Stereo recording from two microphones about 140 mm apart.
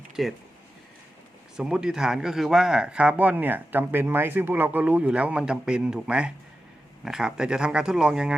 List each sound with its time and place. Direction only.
0.2 s speech: centre (ahead or behind)
1.5 s speech: 5° right (ahead or behind)